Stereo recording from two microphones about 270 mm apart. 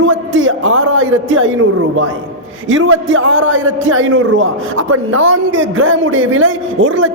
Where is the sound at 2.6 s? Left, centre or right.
Right.